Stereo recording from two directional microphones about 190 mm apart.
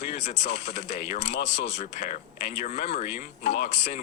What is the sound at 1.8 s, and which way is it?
Speech, 40° left (ahead or behind).